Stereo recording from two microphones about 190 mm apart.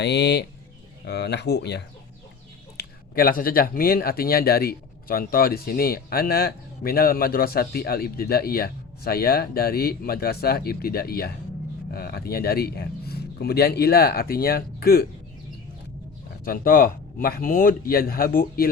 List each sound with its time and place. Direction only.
0.0 s speech: 65° left (ahead or behind)
16.4 s speech: 50° left (ahead or behind)